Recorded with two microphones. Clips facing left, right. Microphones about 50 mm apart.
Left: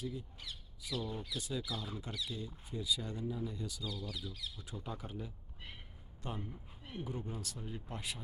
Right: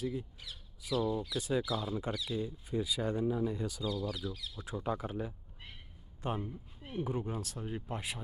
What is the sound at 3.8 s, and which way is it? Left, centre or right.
Speech, centre.